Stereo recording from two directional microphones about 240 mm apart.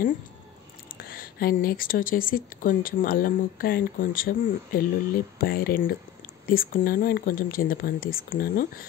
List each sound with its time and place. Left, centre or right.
1.0 s speech: left